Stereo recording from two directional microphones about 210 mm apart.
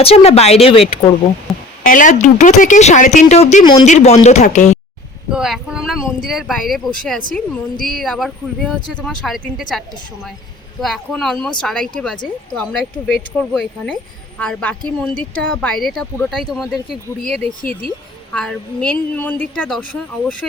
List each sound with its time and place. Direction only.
0.0 s speech: 30° left (ahead or behind)
1.8 s speech: 40° left (ahead or behind); by 3.8 s 20° left (ahead or behind)
3.8 s speech: 35° left (ahead or behind)
5.3 s a woman's voice: 5° right (ahead or behind)
17.6 s speech: 40° left (ahead or behind)
18.3 s a woman's voice: 5° left (ahead or behind)